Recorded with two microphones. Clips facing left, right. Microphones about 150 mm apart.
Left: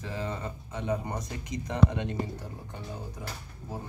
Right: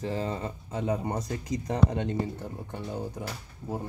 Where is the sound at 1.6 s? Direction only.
35° right (ahead or behind).